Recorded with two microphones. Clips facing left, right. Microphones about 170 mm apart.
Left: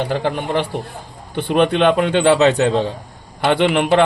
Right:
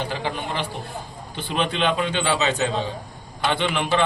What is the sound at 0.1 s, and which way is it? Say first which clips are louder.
Speech: left 8 dB; 55° left (ahead or behind).